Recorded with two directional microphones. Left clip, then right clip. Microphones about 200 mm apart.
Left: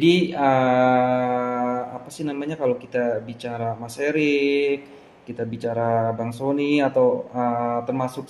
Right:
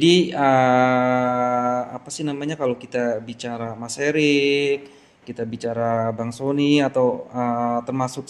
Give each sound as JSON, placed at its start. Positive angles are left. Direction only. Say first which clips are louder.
{"t": 0.0, "sound": "mantra", "louder": "right 2 dB", "side_deg": -55}